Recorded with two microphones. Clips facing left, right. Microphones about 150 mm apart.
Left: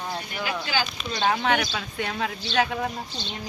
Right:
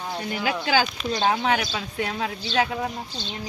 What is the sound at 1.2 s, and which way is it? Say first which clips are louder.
Speech: even; 30° right (ahead or behind).